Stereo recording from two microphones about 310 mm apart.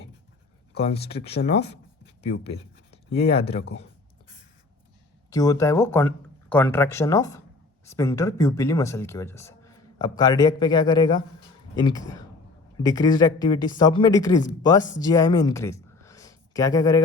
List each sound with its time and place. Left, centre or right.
0.8 s speech: centre
5.3 s speech: centre